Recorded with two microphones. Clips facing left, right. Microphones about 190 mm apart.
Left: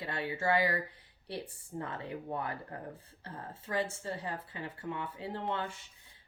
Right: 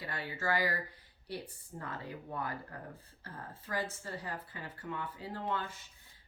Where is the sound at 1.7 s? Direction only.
25° left (ahead or behind).